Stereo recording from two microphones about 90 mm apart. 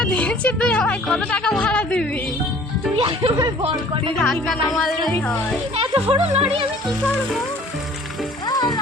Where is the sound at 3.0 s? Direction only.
85° right.